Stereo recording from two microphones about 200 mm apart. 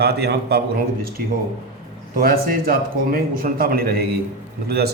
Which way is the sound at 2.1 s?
45° right (ahead or behind).